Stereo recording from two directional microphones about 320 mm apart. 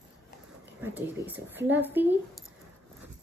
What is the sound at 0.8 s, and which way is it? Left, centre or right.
Speech, centre.